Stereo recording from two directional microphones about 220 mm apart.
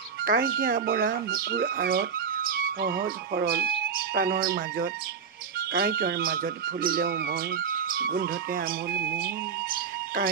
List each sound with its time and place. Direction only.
0.2 s speech: 40° right (ahead or behind)